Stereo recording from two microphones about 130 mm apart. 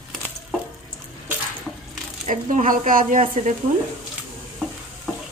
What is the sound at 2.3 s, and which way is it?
Speech, 90° right.